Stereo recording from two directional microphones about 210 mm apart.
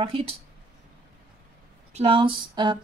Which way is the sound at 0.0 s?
25° right (ahead or behind).